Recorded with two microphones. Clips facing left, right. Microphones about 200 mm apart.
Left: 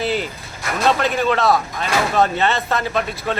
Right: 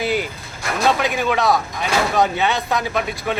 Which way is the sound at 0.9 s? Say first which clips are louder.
Left 1 dB; 10° right (ahead or behind).